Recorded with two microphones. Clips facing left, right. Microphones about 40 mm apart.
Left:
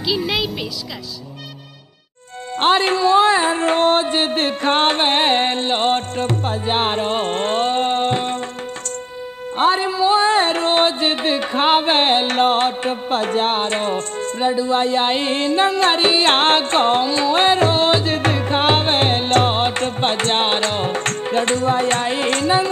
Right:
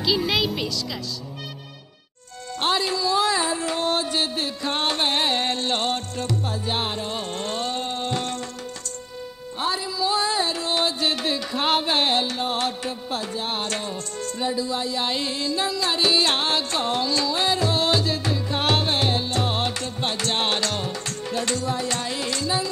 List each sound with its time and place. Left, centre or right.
0.0 s a woman's voice: centre
2.5 s music: left
8.2 s music: left
9.6 s music: left
12.3 s music: left
12.5 s music: left
13.6 s music: left
17.3 s music: left
18.6 s music: left
19.5 s music: left